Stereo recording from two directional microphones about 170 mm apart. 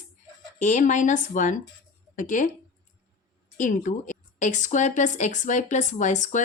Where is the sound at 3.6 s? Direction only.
50° left (ahead or behind).